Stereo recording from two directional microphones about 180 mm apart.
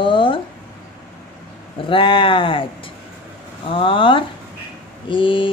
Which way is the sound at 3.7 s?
30° left (ahead or behind).